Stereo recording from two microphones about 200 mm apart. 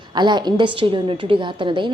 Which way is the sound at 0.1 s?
20° right (ahead or behind).